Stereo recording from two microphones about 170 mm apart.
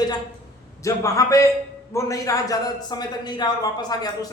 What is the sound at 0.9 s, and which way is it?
A man's voice, 20° left (ahead or behind).